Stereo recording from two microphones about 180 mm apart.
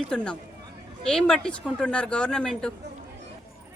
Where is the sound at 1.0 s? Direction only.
5° left (ahead or behind).